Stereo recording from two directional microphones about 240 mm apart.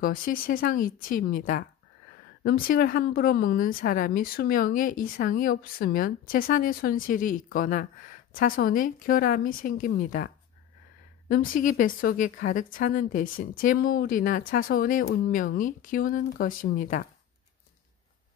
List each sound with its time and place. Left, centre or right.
0.0 s speech: left